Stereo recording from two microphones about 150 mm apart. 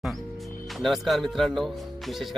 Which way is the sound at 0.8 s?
Centre (ahead or behind).